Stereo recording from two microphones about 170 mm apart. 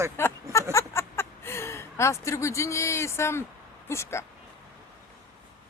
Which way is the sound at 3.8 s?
15° left (ahead or behind).